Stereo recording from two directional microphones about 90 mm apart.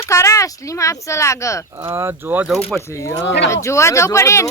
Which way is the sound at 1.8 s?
30° right (ahead or behind).